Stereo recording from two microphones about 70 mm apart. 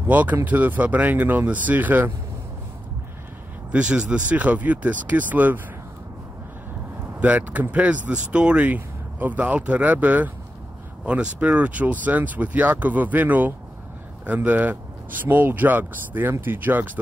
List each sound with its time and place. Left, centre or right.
0.0 s speech: right
3.7 s speech: centre
7.2 s speech: centre